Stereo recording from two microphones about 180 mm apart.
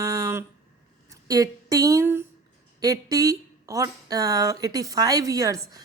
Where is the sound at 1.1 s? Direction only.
20° right (ahead or behind).